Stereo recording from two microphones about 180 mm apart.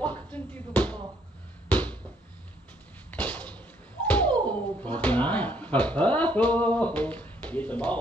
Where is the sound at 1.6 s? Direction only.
10° left (ahead or behind).